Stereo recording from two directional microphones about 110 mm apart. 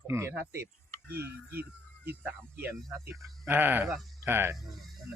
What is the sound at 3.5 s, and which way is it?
Speech, 20° right (ahead or behind).